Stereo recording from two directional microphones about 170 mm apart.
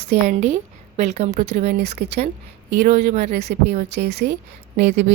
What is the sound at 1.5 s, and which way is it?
A woman's voice, 60° right (ahead or behind).